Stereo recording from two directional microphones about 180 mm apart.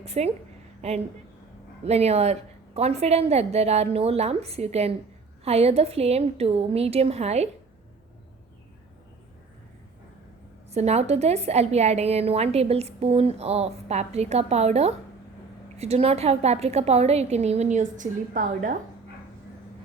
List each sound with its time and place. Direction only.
0.0 s a woman's voice: 35° right (ahead or behind)
10.7 s a woman's voice: 35° right (ahead or behind)